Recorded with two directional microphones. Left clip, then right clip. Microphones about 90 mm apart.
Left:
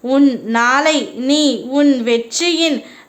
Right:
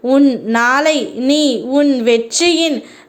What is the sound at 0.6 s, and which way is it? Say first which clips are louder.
A woman's voice: even; 40° right (ahead or behind).